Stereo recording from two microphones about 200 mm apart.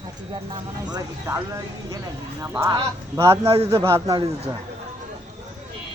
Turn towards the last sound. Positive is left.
turn(degrees=-30)  # may be behind; listen again after turning